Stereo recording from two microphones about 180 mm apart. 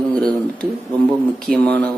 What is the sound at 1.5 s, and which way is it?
Speech, 5° left (ahead or behind).